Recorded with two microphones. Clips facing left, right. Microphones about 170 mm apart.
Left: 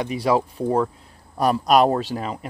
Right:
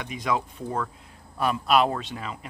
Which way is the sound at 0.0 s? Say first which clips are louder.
Left 7 dB; 35° left (ahead or behind).